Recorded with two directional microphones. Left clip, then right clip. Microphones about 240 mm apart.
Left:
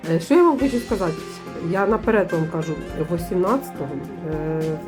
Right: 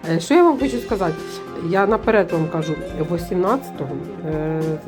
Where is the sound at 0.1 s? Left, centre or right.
Centre.